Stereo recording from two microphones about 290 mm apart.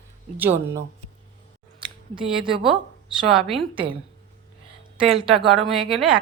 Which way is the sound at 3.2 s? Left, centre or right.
Centre.